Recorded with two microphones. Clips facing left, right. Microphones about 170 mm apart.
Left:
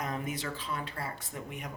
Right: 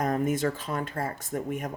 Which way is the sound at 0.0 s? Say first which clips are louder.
Right 10 dB; 45° right (ahead or behind).